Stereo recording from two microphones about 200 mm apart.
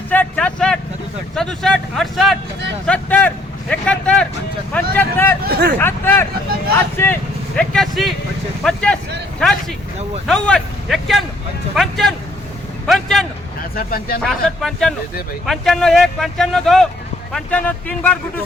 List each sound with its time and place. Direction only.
0.1 s a sound: 5° left (ahead or behind)
1.4 s speech: 5° left (ahead or behind)
5.4 s speech: 50° right (ahead or behind)
5.8 s speech: 10° left (ahead or behind)
13.7 s speech: 45° left (ahead or behind)
14.2 s speech: centre (ahead or behind)